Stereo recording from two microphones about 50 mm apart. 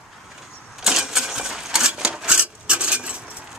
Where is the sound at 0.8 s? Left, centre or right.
Centre.